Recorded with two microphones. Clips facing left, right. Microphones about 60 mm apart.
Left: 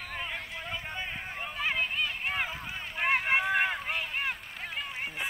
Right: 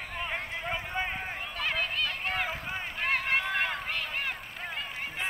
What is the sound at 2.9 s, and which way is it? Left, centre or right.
Run, centre.